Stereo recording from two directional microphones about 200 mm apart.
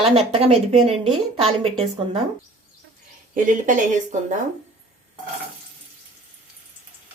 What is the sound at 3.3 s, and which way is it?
Speech, 40° right (ahead or behind).